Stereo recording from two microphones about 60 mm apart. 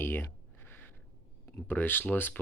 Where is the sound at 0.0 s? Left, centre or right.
Left.